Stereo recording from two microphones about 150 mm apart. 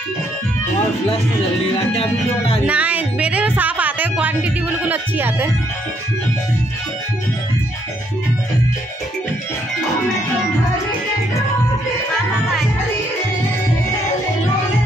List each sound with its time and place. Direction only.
1.9 s music: 40° left (ahead or behind)
2.6 s music: 10° right (ahead or behind)